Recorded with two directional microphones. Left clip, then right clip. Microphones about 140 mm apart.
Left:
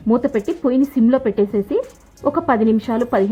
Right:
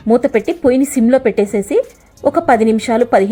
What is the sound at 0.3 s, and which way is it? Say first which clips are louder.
A woman's voice: right 5 dB; 20° right (ahead or behind).